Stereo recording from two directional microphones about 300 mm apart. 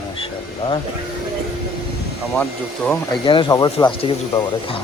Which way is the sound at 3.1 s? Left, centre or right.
Centre.